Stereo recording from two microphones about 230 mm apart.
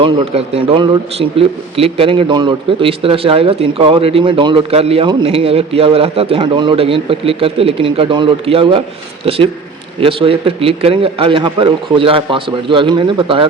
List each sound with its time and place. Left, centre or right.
0.0 s a man's voice: right